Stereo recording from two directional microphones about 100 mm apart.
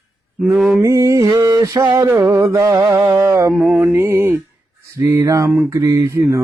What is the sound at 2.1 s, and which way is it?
Mantra, 25° right (ahead or behind).